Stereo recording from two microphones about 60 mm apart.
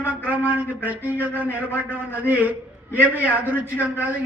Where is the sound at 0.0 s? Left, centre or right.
Right.